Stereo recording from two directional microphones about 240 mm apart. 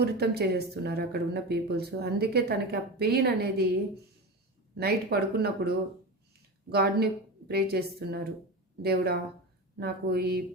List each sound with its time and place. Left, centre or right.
0.0 s speech: right
4.8 s speech: right